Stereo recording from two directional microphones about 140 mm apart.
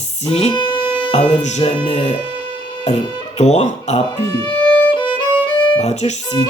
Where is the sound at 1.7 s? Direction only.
40° left (ahead or behind).